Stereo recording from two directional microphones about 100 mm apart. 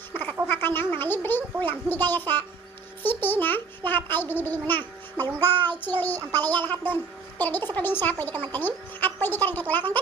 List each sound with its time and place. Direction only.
0.1 s frog: 20° left (ahead or behind)
0.4 s a sound: 20° left (ahead or behind)
3.0 s a child's voice: 20° left (ahead or behind)